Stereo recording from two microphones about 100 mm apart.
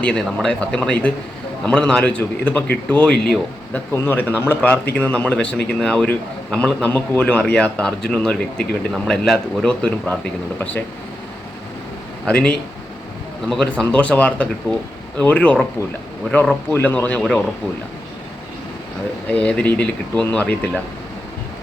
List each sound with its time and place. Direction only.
0.0 s speech: 10° left (ahead or behind)
3.9 s speech: 20° left (ahead or behind); by 6.8 s 5° left (ahead or behind)
6.8 s speech: 15° left (ahead or behind)
12.2 s speech: 10° left (ahead or behind)
16.7 s speech: 15° left (ahead or behind)
19.3 s speech: 10° left (ahead or behind)